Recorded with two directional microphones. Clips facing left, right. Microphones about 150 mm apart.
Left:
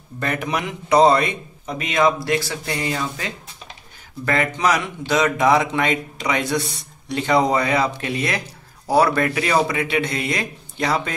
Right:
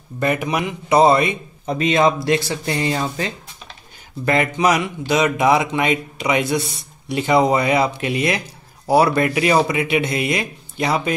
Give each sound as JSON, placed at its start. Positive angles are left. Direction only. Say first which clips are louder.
{"t": 0.2, "sound": "speech", "louder": "right 4 dB", "side_deg": -10}
{"t": 1.7, "sound": "a man's voice", "louder": "right 3 dB", "side_deg": -30}
{"t": 4.3, "sound": "speech", "louder": "right 3 dB", "side_deg": -15}